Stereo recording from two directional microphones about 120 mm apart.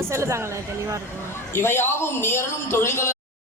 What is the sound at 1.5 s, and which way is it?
A man's voice, 20° left (ahead or behind).